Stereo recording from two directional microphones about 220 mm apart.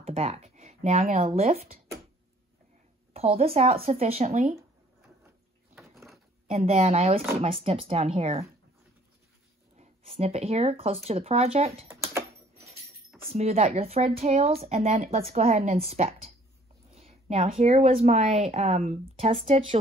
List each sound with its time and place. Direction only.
0.0 s speech: 25° right (ahead or behind)
3.1 s a woman's voice: 25° right (ahead or behind)
5.9 s a sound: centre (ahead or behind)
6.5 s a woman's voice: 30° right (ahead or behind)
9.8 s a woman's voice: 30° right (ahead or behind)
11.9 s a sound: 10° right (ahead or behind)
13.3 s a woman's voice: 30° right (ahead or behind)